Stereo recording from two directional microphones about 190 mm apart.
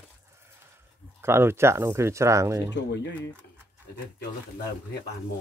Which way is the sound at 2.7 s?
65° left (ahead or behind).